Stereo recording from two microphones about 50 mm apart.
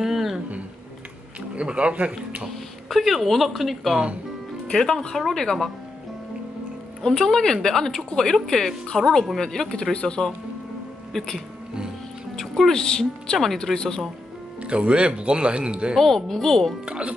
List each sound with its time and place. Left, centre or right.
0.0 s a sound: centre
1.5 s speech: right
2.4 s speech: centre
4.7 s speech: centre
7.0 s speech: centre
12.4 s music: centre
12.8 s speech: centre
14.6 s speech: right
16.0 s speech: centre
16.8 s speech: right